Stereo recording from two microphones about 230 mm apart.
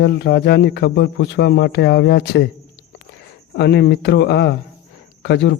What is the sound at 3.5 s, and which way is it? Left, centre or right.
Speech, left.